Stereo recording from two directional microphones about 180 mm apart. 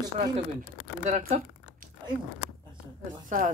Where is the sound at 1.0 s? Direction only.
40° right (ahead or behind).